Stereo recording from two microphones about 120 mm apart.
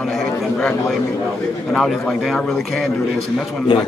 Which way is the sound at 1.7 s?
Centre (ahead or behind).